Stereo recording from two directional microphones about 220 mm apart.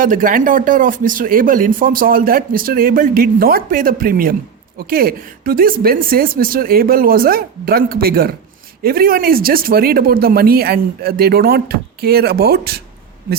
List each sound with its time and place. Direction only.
0.0 s speech: 40° right (ahead or behind)